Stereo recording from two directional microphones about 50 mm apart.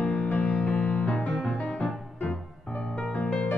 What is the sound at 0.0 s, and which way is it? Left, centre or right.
Music, left.